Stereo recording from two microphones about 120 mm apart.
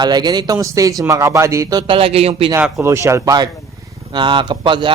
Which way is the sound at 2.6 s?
5° right (ahead or behind).